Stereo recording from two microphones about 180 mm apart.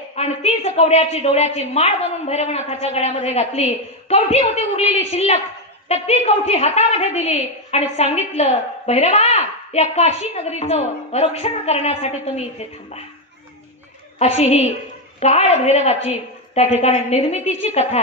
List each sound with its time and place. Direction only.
0.1 s a woman's voice: 35° left (ahead or behind)
14.1 s a woman's voice: 40° left (ahead or behind)